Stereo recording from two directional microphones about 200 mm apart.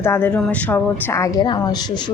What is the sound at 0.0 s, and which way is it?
A woman's voice, 10° left (ahead or behind).